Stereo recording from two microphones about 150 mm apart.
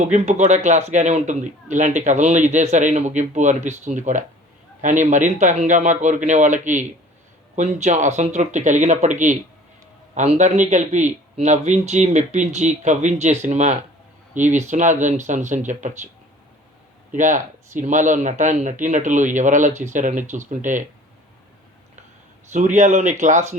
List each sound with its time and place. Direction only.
0.0 s a man's voice: 50° right (ahead or behind)
17.1 s speech: 60° right (ahead or behind)
22.5 s a man's voice: 55° right (ahead or behind)